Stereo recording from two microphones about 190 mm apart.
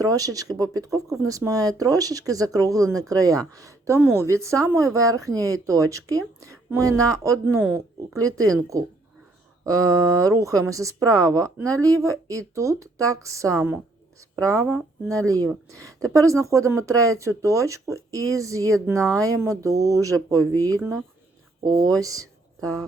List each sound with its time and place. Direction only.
0.0 s speech: 20° right (ahead or behind)
13.6 s a sound: 10° right (ahead or behind)
14.7 s speech: 5° right (ahead or behind)
16.1 s speech: 15° right (ahead or behind)